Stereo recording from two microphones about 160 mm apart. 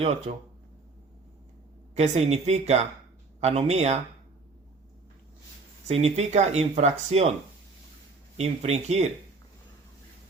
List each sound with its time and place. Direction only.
0.3 s speech: 60° right (ahead or behind)
2.0 s speech: 40° right (ahead or behind)
5.9 s speech: 40° right (ahead or behind)
8.4 s speech: 40° right (ahead or behind)